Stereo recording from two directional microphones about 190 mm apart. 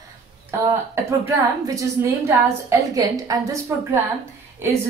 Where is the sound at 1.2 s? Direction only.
15° right (ahead or behind).